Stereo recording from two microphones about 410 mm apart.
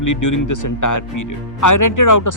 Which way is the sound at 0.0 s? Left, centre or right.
Left.